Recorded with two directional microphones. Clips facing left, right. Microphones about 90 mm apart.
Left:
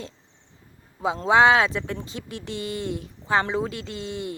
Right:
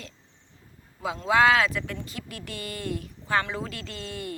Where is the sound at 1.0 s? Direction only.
25° left (ahead or behind).